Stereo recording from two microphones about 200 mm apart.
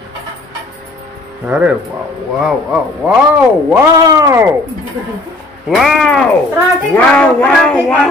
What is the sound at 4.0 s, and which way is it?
Speech, 15° right (ahead or behind).